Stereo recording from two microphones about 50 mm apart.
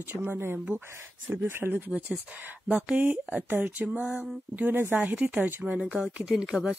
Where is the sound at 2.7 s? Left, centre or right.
Right.